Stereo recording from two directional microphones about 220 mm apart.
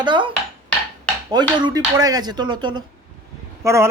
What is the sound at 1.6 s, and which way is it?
Speech, 15° right (ahead or behind).